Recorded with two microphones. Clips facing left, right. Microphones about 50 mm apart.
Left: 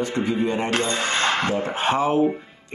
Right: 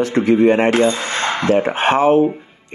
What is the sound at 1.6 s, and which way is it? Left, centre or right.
Speech, right.